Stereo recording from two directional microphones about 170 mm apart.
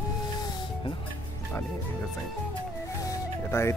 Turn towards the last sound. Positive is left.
turn(degrees=15)  # may be behind; listen again after turning